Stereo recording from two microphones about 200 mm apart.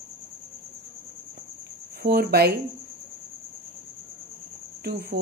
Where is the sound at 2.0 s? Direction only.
50° right (ahead or behind).